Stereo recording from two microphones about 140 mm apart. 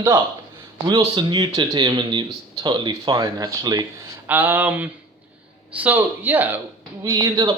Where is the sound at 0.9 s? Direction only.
30° right (ahead or behind).